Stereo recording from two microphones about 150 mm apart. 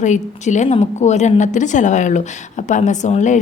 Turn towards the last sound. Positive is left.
turn(degrees=55)  # may be behind; listen again after turning